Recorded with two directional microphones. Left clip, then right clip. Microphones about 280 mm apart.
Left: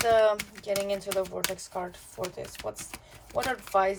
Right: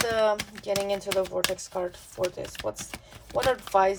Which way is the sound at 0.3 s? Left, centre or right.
Right.